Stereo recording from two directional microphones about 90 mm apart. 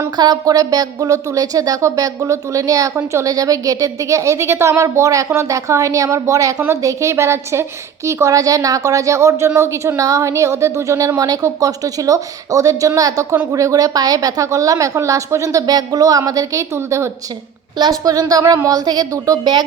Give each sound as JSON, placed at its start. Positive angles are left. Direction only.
{"t": 0.2, "sound": "a woman's voice", "side_deg": -45}
{"t": 17.7, "sound": "speech", "side_deg": -50}